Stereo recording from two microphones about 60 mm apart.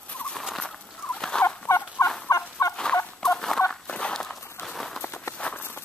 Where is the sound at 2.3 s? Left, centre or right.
Left.